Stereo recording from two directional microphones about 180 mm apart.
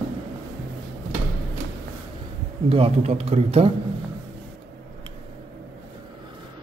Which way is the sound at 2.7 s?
35° right (ahead or behind).